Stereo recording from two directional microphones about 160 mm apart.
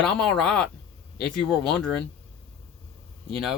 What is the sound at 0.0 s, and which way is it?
Speech, 5° left (ahead or behind).